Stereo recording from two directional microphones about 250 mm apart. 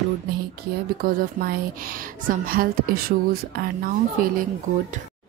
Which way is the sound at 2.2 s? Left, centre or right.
Right.